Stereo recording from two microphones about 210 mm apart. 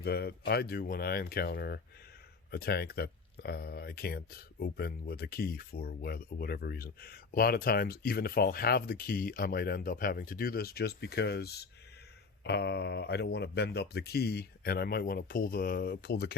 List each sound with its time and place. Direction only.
0.0 s speech: 50° left (ahead or behind)